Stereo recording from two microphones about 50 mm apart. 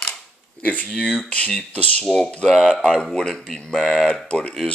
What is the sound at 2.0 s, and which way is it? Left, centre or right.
Speech, centre.